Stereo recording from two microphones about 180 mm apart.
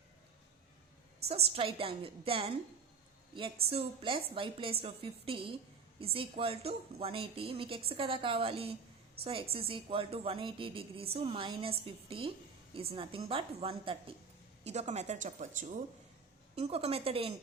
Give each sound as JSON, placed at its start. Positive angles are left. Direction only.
{"t": 1.5, "sound": "a woman's voice", "side_deg": -30}
{"t": 3.7, "sound": "a woman's voice", "side_deg": -30}